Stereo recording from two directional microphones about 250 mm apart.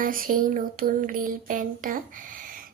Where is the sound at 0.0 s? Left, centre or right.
Right.